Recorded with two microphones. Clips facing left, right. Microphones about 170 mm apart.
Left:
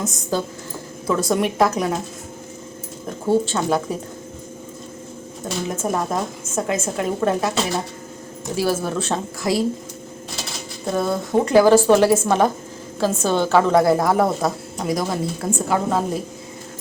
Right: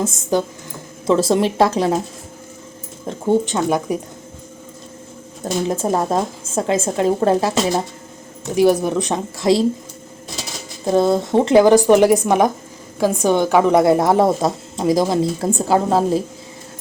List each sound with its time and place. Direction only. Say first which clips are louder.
0.0 s a woman's voice: right 5 dB; 20° right (ahead or behind)
3.1 s speech: right 2 dB; 20° right (ahead or behind)
5.6 s a woman's voice: right 4 dB; 30° right (ahead or behind)
8.5 s speech: right 7 dB; 20° right (ahead or behind)
10.9 s a woman's voice: right 5 dB; 25° right (ahead or behind)